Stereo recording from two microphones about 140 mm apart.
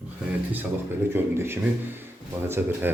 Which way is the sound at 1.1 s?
15° right (ahead or behind).